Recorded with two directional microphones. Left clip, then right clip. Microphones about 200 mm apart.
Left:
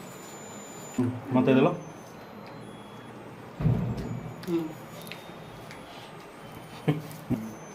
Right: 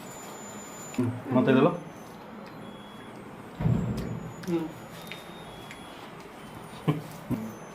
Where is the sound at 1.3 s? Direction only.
10° left (ahead or behind).